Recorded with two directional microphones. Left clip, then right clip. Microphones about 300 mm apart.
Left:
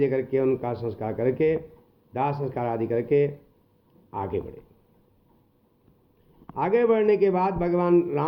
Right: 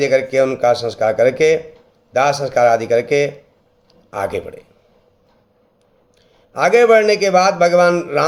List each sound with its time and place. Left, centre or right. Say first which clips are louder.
0.0 s a man's voice: right 9 dB; centre
6.6 s a man's voice: right 11 dB; centre